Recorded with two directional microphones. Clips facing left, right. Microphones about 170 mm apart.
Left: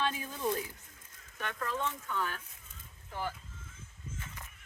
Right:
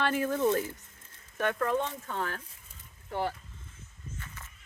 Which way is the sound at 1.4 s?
55° right (ahead or behind).